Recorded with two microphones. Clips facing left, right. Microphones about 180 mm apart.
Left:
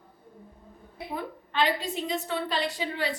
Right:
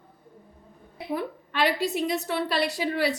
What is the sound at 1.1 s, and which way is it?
A woman's voice, 70° right (ahead or behind).